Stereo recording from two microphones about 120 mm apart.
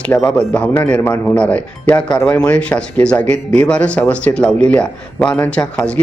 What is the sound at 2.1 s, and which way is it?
Speech, 30° left (ahead or behind).